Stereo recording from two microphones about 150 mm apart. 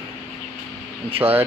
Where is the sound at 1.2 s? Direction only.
10° right (ahead or behind).